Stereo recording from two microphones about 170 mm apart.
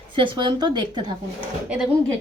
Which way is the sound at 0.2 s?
25° right (ahead or behind).